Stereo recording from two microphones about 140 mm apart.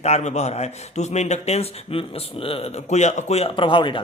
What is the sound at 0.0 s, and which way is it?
Speech, 55° left (ahead or behind).